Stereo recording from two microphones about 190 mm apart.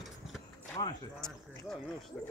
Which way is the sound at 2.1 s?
Centre (ahead or behind).